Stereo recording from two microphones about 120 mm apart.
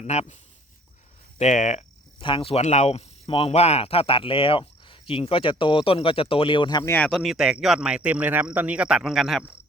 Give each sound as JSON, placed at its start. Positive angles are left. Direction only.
{"t": 0.0, "sound": "speech", "side_deg": 65}
{"t": 1.4, "sound": "speech", "side_deg": 85}
{"t": 2.1, "sound": "speech", "side_deg": 45}
{"t": 2.6, "sound": "speech", "side_deg": 70}
{"t": 6.8, "sound": "speech", "side_deg": 15}
{"t": 7.1, "sound": "speech", "side_deg": 0}